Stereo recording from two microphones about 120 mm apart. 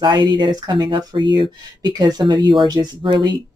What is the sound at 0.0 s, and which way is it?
Speech, 40° right (ahead or behind).